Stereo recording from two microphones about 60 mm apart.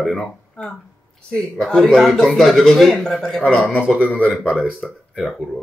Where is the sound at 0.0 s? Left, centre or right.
Centre.